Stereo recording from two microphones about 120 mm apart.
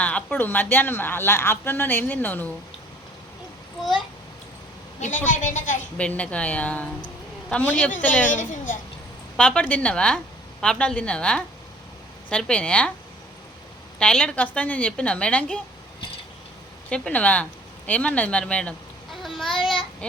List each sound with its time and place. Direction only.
0.0 s a woman's voice: 10° left (ahead or behind)
4.9 s a woman's voice: 90° left
6.0 s a woman's voice: 10° left (ahead or behind)
8.3 s a woman's voice: 90° left
9.4 s a woman's voice: 10° left (ahead or behind)
14.0 s a woman's voice: 5° left (ahead or behind)
16.9 s a woman's voice: 10° left (ahead or behind)
19.1 s a sound: centre (ahead or behind)
19.6 s a child's voice: centre (ahead or behind)